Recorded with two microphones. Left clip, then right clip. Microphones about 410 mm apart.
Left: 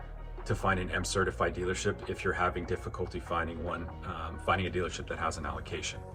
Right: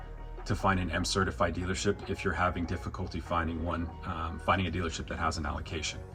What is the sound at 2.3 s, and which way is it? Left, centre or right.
Speech, left.